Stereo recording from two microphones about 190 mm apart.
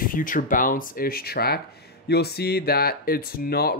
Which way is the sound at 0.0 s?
45° left (ahead or behind).